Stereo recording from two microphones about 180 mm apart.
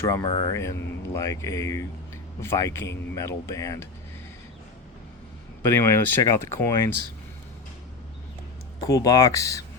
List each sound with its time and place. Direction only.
0.0 s speech: 15° left (ahead or behind)
5.6 s speech: 15° left (ahead or behind)
8.9 s speech: 20° left (ahead or behind)